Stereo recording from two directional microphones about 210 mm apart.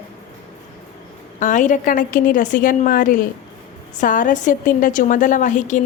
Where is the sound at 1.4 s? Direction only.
35° left (ahead or behind).